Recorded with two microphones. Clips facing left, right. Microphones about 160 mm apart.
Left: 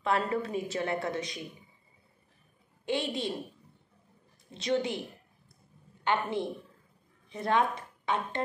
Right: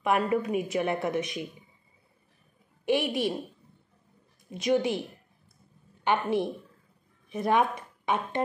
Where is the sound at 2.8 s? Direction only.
20° right (ahead or behind).